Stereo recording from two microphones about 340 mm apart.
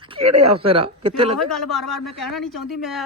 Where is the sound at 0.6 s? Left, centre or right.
Centre.